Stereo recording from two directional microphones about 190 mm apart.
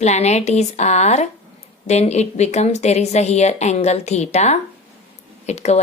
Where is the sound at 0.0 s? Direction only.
35° left (ahead or behind).